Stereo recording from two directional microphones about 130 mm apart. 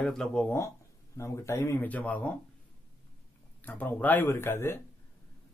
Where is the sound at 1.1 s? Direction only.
20° left (ahead or behind).